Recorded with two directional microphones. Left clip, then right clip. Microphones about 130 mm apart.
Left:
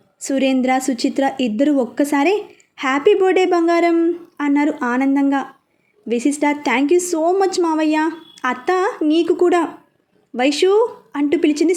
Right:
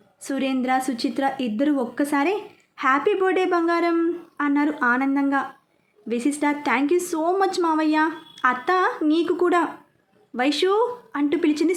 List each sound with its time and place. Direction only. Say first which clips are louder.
0.2 s a woman's voice: left 8 dB; 30° left (ahead or behind)